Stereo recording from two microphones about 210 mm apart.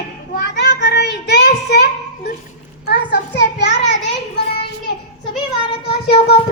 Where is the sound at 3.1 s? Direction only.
55° left (ahead or behind).